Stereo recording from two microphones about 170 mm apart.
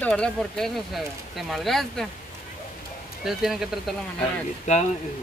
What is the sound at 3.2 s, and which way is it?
Speech, 5° right (ahead or behind).